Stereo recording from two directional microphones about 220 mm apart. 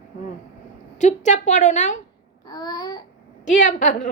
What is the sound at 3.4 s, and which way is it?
Speech, 35° left (ahead or behind).